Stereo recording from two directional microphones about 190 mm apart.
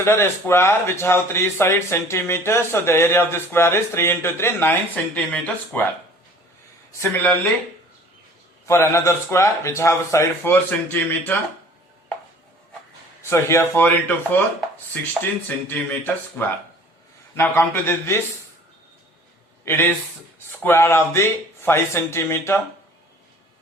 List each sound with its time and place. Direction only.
0.0 s a man's voice: 10° left (ahead or behind)
7.0 s a man's voice: 10° left (ahead or behind)
8.6 s a man's voice: 15° left (ahead or behind)
13.3 s a man's voice: 15° left (ahead or behind)
15.4 s a man's voice: 10° left (ahead or behind)
19.6 s a man's voice: 10° left (ahead or behind)